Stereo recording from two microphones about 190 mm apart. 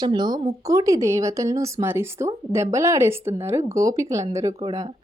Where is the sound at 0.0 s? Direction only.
25° right (ahead or behind).